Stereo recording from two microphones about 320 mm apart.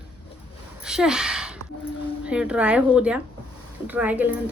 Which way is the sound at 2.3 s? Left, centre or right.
Centre.